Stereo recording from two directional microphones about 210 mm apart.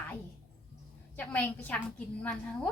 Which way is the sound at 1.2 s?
10° left (ahead or behind).